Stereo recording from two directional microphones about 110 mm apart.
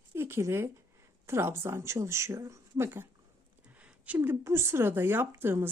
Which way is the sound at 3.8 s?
10° right (ahead or behind).